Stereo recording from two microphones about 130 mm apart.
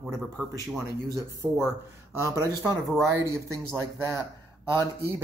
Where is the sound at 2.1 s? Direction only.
20° right (ahead or behind).